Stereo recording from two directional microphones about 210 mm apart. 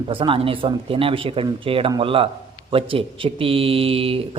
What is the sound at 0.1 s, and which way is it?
Speech, 25° right (ahead or behind).